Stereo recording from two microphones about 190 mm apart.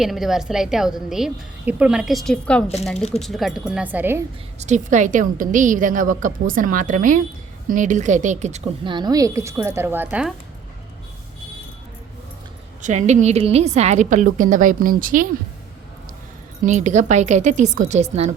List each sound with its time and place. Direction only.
0.0 s a woman's voice: centre (ahead or behind)
4.6 s a woman's voice: 40° right (ahead or behind); by 10.3 s 5° right (ahead or behind)
12.8 s a woman's voice: 40° right (ahead or behind)
16.6 s a woman's voice: 40° right (ahead or behind)